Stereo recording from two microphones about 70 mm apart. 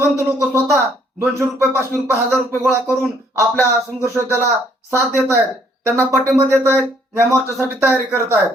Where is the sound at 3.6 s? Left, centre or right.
Right.